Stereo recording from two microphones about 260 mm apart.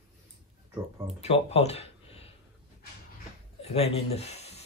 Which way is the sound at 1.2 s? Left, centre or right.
Left.